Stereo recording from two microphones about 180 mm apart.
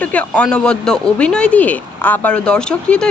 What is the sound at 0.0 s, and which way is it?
A woman's voice, 10° left (ahead or behind).